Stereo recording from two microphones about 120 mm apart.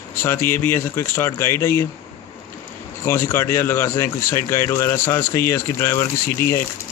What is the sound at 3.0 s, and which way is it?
Speech, 20° left (ahead or behind).